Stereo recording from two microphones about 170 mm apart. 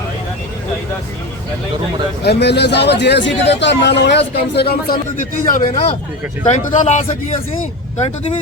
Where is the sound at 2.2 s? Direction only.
80° left; by 8.4 s 40° left (ahead or behind).